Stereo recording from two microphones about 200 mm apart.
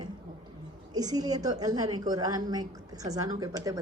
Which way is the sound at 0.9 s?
20° right (ahead or behind).